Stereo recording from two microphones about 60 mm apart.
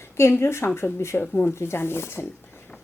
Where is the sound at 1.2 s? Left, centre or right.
Left.